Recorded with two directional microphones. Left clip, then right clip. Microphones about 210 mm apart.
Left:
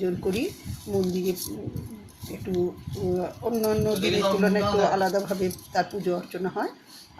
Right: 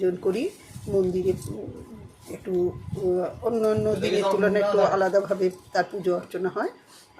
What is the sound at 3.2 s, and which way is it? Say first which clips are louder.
Speech: right 3 dB; 15° right (ahead or behind).